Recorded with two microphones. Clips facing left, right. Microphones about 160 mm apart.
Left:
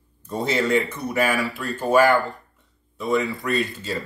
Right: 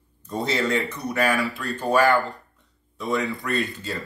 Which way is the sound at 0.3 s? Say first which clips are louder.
Left 3 dB; 10° left (ahead or behind).